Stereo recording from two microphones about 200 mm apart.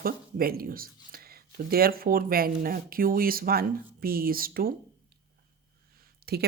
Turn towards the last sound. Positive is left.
turn(degrees=-50)  # may be behind; listen again after turning